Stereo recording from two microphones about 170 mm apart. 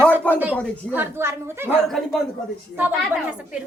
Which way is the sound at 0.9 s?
10° right (ahead or behind).